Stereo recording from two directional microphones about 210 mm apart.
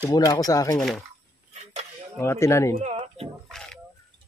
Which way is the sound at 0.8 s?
5° left (ahead or behind).